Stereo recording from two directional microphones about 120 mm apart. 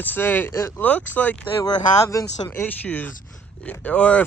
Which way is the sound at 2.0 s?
30° left (ahead or behind).